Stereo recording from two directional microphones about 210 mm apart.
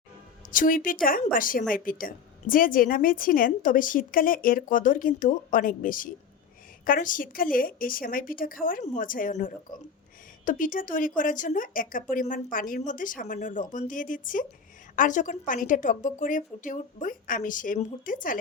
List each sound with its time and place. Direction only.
0.5 s a woman's voice: 40° left (ahead or behind)